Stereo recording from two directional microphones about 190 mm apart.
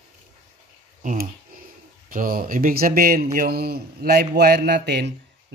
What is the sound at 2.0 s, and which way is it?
A man's voice, 50° right (ahead or behind).